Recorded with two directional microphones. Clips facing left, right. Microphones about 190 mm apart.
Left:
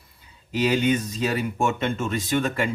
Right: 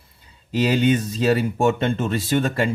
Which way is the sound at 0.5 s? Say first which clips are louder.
Right 3 dB; 30° right (ahead or behind).